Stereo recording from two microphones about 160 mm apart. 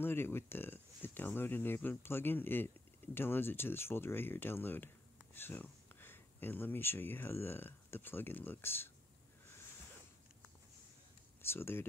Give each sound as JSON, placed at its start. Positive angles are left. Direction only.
{"t": 0.0, "sound": "speech", "side_deg": 15}
{"t": 11.4, "sound": "speech", "side_deg": 15}